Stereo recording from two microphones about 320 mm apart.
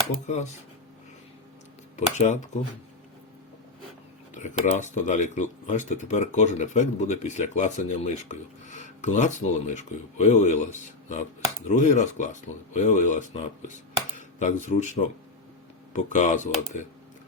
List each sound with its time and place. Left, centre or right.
0.1 s speech: left
2.0 s speech: left
4.4 s speech: left